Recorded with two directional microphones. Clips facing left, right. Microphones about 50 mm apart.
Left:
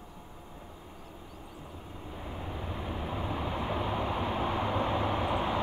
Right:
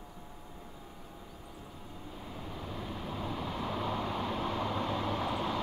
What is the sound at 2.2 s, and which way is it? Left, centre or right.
Vehicle, left.